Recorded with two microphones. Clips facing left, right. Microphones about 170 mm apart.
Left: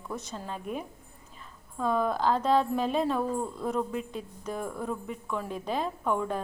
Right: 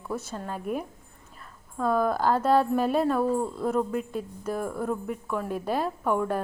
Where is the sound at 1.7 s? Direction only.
5° right (ahead or behind).